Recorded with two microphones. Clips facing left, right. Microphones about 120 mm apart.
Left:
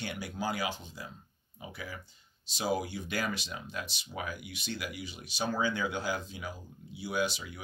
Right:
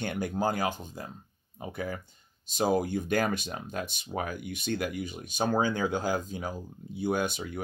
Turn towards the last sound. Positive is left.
turn(degrees=-50)  # may be behind; listen again after turning